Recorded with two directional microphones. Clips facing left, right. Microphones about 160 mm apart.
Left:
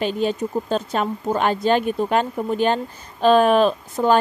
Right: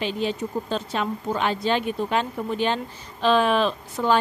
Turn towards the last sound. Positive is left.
turn(degrees=45)  # may be behind; listen again after turning